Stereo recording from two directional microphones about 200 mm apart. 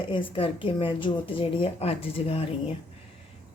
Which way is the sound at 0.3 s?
25° left (ahead or behind).